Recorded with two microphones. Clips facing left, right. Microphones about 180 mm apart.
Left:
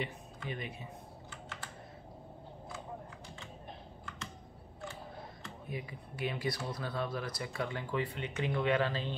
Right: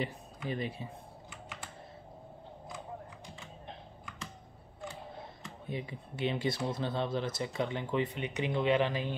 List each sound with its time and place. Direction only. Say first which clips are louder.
0.0 s speech: right 3 dB; 35° right (ahead or behind)
5.7 s speech: right 4 dB; 25° right (ahead or behind)